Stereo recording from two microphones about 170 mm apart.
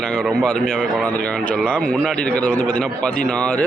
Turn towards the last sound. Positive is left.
turn(degrees=5)  # may be behind; listen again after turning